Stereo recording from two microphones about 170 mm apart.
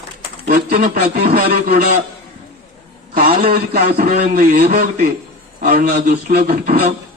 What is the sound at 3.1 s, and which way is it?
A man's voice, 55° right (ahead or behind).